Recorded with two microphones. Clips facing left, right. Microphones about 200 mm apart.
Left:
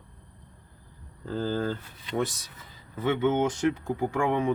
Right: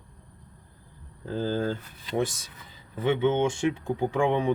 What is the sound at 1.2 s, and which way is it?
Speech, 15° right (ahead or behind).